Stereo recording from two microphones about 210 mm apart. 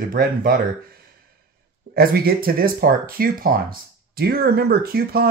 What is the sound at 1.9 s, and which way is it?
Speech, 45° right (ahead or behind).